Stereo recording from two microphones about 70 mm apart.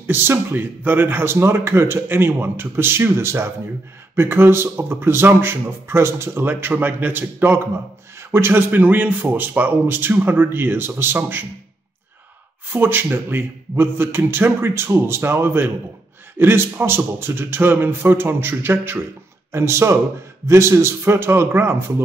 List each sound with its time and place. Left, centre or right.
0.0 s a man's voice: right
12.7 s speech: right